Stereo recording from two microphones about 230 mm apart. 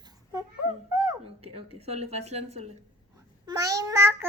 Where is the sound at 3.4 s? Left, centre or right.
Centre.